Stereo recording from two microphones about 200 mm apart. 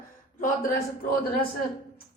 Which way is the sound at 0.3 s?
45° left (ahead or behind).